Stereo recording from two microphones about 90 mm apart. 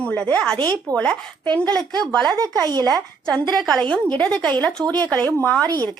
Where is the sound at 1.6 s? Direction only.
45° right (ahead or behind).